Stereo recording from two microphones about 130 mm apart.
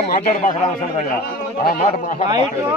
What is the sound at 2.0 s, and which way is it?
Speech, 70° left (ahead or behind).